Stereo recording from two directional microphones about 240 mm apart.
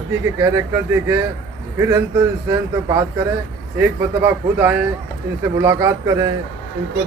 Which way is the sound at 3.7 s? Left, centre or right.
Centre.